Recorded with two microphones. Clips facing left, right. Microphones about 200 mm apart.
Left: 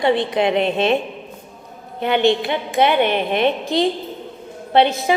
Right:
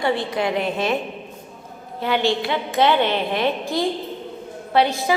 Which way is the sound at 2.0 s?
20° left (ahead or behind).